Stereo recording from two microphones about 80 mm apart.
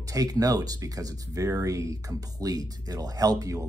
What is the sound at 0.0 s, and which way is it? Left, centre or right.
Speech, right.